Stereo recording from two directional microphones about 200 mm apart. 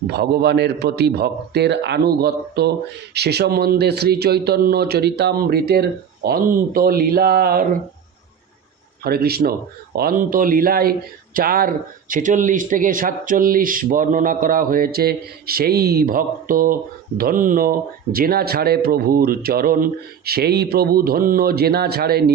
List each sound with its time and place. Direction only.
0.1 s a man's voice: 55° right (ahead or behind)
9.0 s speech: 50° right (ahead or behind)